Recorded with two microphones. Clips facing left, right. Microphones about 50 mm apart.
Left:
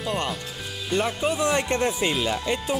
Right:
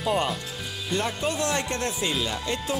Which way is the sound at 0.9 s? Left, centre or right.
Centre.